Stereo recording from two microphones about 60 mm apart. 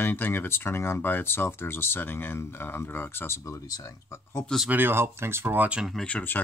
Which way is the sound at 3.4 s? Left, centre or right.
Left.